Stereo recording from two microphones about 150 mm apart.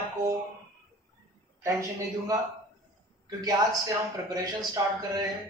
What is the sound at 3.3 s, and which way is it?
A man's voice, 25° right (ahead or behind).